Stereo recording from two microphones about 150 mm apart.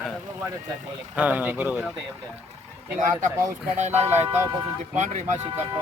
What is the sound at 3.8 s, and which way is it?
Speech, 50° right (ahead or behind).